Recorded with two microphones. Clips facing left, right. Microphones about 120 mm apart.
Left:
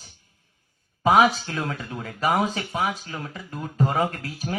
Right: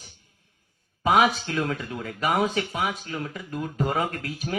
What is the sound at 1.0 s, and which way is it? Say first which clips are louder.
Speech: left 2 dB; 30° left (ahead or behind).